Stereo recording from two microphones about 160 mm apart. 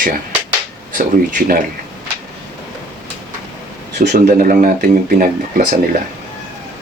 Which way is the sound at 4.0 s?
55° right (ahead or behind).